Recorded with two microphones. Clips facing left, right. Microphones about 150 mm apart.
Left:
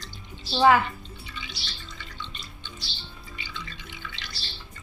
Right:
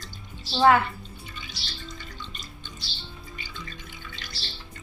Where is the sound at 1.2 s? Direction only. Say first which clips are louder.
Left 1 dB; 45° right (ahead or behind).